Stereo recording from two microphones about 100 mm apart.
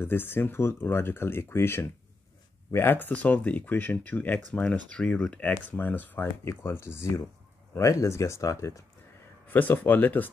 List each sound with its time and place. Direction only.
0.0 s speech: 20° left (ahead or behind)
9.5 s speech: 15° left (ahead or behind)